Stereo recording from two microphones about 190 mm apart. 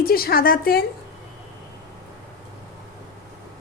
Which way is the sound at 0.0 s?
50° left (ahead or behind).